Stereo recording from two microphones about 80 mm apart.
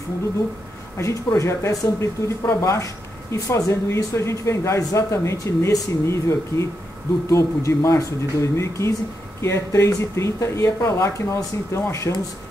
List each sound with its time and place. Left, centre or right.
0.9 s speech: left